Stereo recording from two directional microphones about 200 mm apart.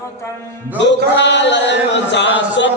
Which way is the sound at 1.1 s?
60° left (ahead or behind).